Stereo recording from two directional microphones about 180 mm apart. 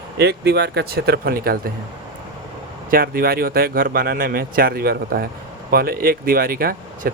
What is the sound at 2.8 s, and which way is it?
A man's voice, 55° right (ahead or behind).